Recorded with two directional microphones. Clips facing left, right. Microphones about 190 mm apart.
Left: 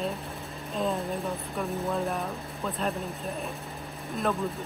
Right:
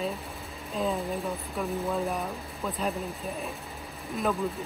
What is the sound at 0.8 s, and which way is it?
Speech, centre (ahead or behind).